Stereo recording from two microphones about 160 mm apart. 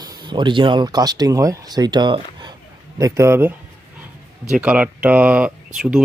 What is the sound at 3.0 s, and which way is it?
Speech, 15° right (ahead or behind).